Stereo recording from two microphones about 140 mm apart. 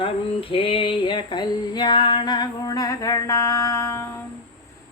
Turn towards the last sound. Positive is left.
turn(degrees=20)  # may be behind; listen again after turning